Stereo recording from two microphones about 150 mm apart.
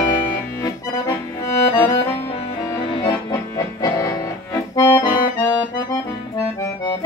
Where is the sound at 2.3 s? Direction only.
35° left (ahead or behind).